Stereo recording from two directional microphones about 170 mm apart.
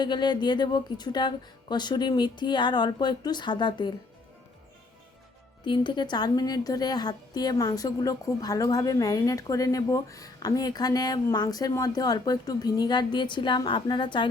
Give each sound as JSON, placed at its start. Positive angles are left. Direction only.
{"t": 0.0, "sound": "a woman's voice", "side_deg": 25}
{"t": 5.6, "sound": "a woman's voice", "side_deg": 30}